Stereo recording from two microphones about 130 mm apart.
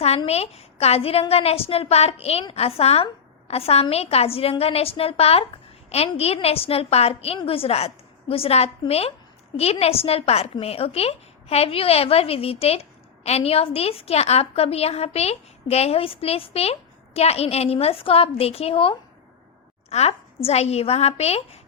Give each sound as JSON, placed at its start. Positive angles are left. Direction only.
{"t": 0.3, "sound": "a woman's voice", "side_deg": 55}